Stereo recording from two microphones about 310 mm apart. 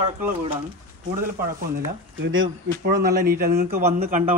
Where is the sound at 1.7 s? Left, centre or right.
Right.